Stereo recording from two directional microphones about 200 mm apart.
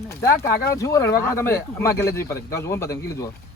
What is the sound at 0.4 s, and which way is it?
A man's voice, 15° left (ahead or behind).